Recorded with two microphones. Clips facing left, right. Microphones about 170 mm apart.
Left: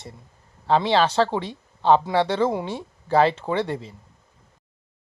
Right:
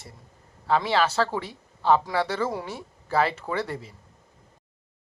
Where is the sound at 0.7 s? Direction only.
30° left (ahead or behind).